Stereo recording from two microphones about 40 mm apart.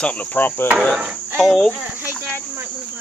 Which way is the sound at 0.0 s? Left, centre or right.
Left.